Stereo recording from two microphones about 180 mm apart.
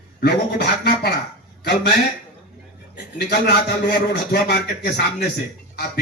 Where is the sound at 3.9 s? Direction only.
65° left (ahead or behind).